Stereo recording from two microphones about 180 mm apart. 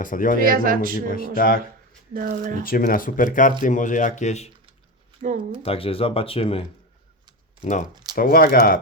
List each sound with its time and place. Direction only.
0.0 s speech: 50° left (ahead or behind)
0.3 s speech: 50° right (ahead or behind)
1.4 s speech: 55° left (ahead or behind)
2.1 s speech: 50° right (ahead or behind)
2.6 s speech: 50° left (ahead or behind)
5.6 s speech: 30° left (ahead or behind)
7.6 s speech: 45° left (ahead or behind)